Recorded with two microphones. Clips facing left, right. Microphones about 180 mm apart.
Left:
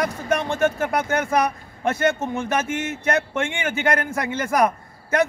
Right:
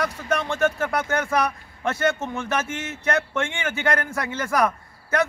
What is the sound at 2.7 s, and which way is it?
Speech, 55° left (ahead or behind).